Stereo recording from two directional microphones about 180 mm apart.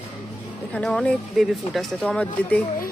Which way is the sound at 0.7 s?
5° left (ahead or behind).